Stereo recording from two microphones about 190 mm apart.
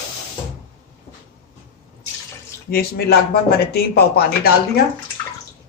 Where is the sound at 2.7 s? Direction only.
55° left (ahead or behind).